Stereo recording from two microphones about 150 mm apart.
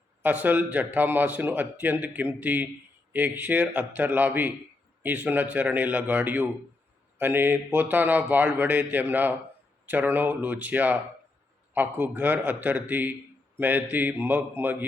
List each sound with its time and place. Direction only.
0.2 s a man's voice: 10° right (ahead or behind)